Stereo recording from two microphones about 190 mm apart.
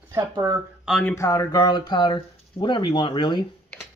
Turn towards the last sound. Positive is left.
turn(degrees=25)  # may be behind; listen again after turning